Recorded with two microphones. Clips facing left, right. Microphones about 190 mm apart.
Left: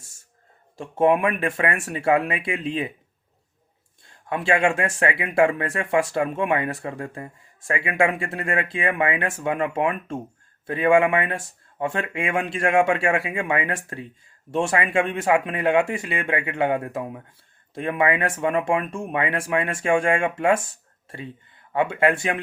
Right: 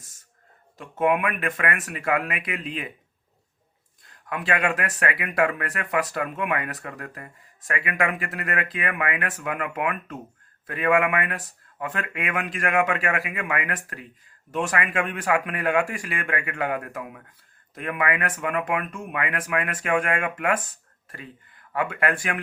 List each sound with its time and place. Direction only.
0.8 s speech: 30° left (ahead or behind)
4.0 s speech: 25° left (ahead or behind)